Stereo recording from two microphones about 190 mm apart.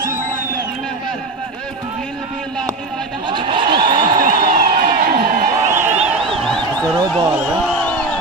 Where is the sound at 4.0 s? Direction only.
45° right (ahead or behind).